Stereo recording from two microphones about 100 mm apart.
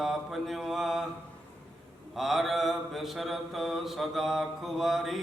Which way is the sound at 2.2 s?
Centre (ahead or behind).